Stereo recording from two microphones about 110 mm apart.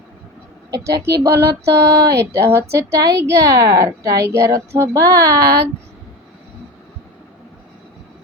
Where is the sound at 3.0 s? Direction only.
30° right (ahead or behind).